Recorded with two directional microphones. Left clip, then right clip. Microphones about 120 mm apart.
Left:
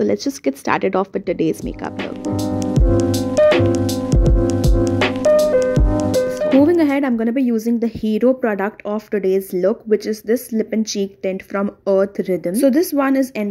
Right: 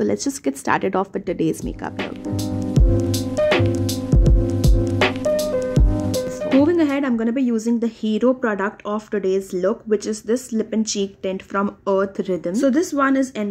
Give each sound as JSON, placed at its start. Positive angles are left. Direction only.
{"t": 0.0, "sound": "speech", "side_deg": 20}
{"t": 2.0, "sound": "music", "side_deg": 0}
{"t": 6.6, "sound": "speech", "side_deg": 30}